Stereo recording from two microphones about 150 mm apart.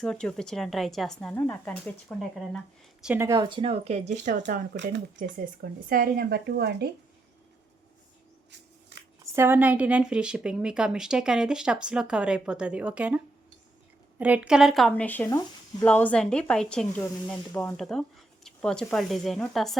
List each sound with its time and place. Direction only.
0.0 s speech: 5° left (ahead or behind)
3.2 s speech: 25° right (ahead or behind); by 5.3 s 60° right (ahead or behind)
5.9 s a woman's voice: 85° right
9.2 s speech: 15° right (ahead or behind); by 19.7 s centre (ahead or behind)